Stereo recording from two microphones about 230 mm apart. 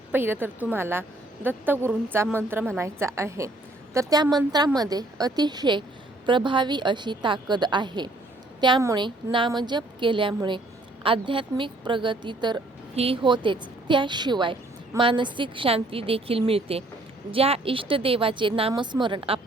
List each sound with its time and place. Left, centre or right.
0.1 s a woman's voice: centre